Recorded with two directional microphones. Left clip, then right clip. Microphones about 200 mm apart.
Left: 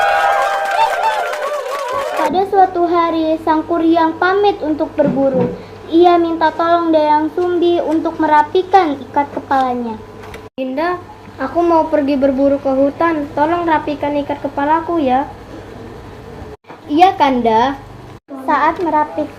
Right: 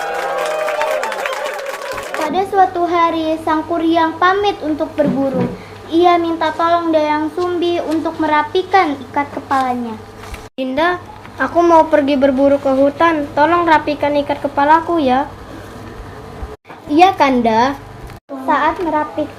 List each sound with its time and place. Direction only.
0.0 s a sound: centre (ahead or behind)
2.3 s a child's voice: 15° left (ahead or behind)
5.9 s a child's voice: 15° left (ahead or behind)
7.0 s child singing: 10° right (ahead or behind)
7.6 s a child's voice: 15° left (ahead or behind)
10.6 s a woman's voice: 40° right (ahead or behind)
16.9 s a woman's voice: 35° right (ahead or behind)
18.4 s a child's voice: 10° left (ahead or behind)